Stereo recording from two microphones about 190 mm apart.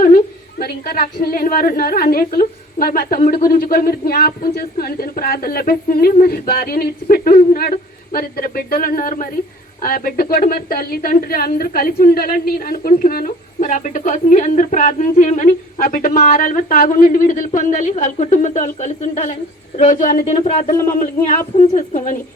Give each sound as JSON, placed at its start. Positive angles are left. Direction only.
{"t": 0.6, "sound": "a woman's voice", "side_deg": 55}